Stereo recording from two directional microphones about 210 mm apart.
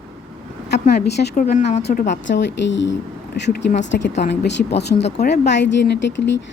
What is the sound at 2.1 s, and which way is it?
Speech, 60° left (ahead or behind).